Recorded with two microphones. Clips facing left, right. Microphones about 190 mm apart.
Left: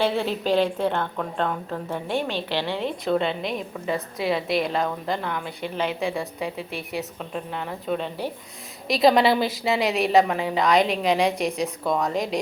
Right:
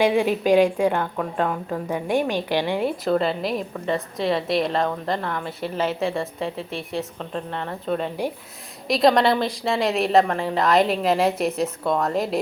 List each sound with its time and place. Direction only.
0.0 s a woman's voice: 15° right (ahead or behind)
3.0 s a woman's voice: centre (ahead or behind)